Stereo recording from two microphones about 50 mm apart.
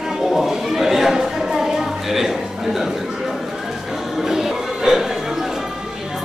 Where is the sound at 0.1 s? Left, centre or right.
Centre.